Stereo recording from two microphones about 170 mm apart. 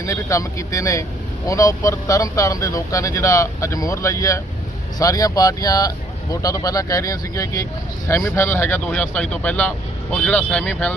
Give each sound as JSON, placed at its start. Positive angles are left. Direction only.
{"t": 0.0, "sound": "speech", "side_deg": 20}